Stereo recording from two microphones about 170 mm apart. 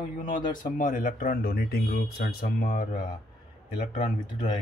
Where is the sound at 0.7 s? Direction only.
50° left (ahead or behind).